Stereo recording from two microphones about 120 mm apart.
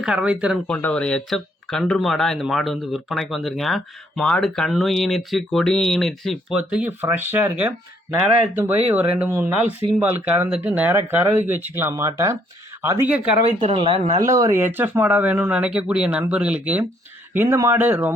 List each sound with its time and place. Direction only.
0.0 s speech: 10° right (ahead or behind)
0.7 s speech: 10° left (ahead or behind); by 6.9 s 5° right (ahead or behind)
7.0 s speech: 15° right (ahead or behind)
8.9 s speech: 15° right (ahead or behind)
13.1 s speech: 10° right (ahead or behind)
13.4 s speech: 70° right (ahead or behind)
14.2 s speech: 25° right (ahead or behind)
14.6 s speech: 15° right (ahead or behind)